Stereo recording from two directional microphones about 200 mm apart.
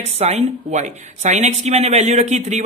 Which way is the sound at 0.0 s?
35° right (ahead or behind).